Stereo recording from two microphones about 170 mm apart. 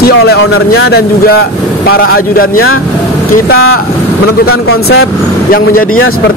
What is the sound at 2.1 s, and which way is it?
Speech, 60° left (ahead or behind).